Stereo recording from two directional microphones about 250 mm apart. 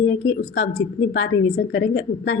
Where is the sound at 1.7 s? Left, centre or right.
Left.